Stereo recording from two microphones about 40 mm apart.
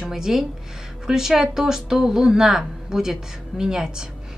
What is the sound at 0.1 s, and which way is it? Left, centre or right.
Speech, centre.